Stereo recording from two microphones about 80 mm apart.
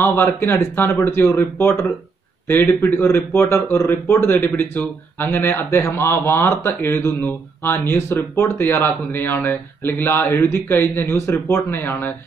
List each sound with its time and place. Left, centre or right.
0.0 s speech: left